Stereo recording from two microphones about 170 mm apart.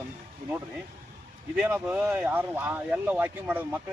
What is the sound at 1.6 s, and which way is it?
Speech, 10° right (ahead or behind).